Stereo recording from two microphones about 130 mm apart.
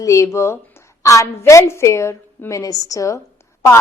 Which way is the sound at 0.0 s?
25° left (ahead or behind).